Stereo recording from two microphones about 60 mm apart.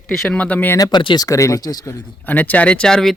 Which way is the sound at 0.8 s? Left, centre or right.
Left.